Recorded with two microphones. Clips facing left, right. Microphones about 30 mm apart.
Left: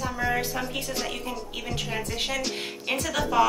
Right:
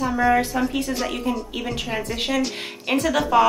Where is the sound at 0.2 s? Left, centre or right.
Centre.